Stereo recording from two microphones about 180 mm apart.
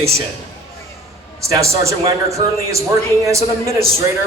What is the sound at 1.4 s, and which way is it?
A man's voice, 15° right (ahead or behind).